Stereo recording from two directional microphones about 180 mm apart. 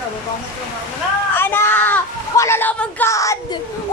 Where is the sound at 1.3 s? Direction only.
10° left (ahead or behind).